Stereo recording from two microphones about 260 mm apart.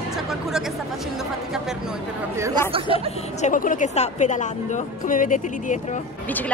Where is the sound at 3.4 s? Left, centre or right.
Left.